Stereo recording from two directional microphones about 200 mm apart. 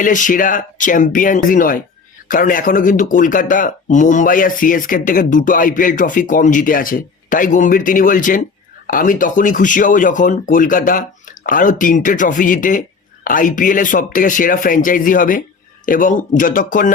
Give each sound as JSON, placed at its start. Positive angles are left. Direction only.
{"t": 0.0, "sound": "speech", "side_deg": 40}